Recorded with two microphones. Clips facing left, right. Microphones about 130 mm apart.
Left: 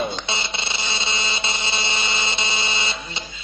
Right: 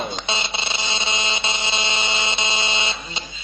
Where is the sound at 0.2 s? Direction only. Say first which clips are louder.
Right 2 dB; 20° right (ahead or behind).